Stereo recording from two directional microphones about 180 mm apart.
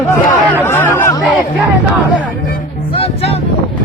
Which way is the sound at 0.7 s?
10° left (ahead or behind).